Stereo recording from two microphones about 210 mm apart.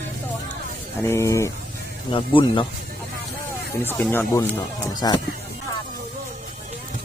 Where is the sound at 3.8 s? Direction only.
10° left (ahead or behind).